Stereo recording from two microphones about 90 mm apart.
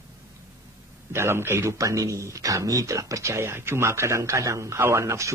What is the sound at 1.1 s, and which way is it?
Speech, 25° right (ahead or behind).